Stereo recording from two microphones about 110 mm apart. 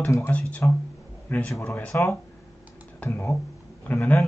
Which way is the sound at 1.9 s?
25° left (ahead or behind).